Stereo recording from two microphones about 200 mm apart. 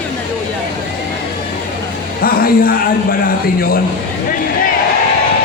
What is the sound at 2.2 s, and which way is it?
Speech, 45° left (ahead or behind).